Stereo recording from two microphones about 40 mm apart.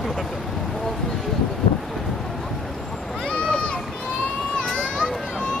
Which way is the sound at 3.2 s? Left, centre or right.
Left.